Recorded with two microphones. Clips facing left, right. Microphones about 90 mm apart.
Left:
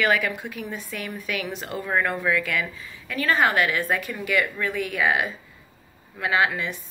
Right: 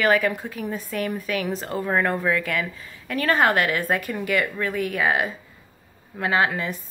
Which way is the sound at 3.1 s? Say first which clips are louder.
Right 2 dB; 50° right (ahead or behind).